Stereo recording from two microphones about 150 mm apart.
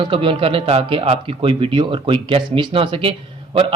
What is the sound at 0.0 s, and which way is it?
Speech, 35° right (ahead or behind).